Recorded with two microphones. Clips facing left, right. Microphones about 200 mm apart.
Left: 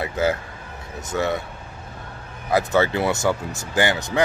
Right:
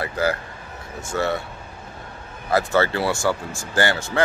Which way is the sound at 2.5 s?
15° left (ahead or behind).